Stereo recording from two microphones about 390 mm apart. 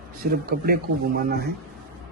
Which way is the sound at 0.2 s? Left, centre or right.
Right.